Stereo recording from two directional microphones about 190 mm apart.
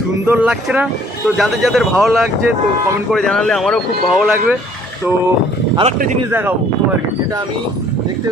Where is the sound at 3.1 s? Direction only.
Centre (ahead or behind).